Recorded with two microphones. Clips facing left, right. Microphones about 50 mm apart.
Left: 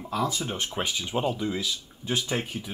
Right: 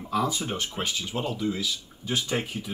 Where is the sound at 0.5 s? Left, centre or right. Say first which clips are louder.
Even; centre.